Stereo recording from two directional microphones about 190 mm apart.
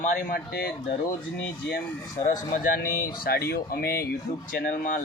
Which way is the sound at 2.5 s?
45° left (ahead or behind).